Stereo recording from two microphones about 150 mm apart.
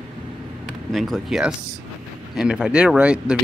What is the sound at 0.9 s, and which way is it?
Speech, centre (ahead or behind).